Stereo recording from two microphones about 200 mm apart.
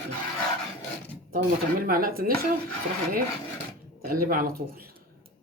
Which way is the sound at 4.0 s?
45° right (ahead or behind).